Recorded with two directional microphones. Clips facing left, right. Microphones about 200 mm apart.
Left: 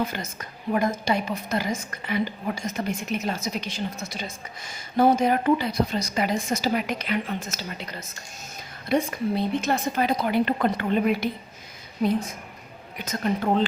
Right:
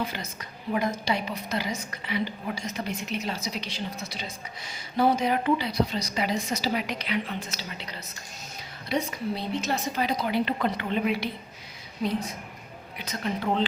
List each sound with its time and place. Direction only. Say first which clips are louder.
0.0 s a woman's voice: left 4 dB; 50° left (ahead or behind)
12.0 s a woman's voice: left 5 dB; 55° left (ahead or behind)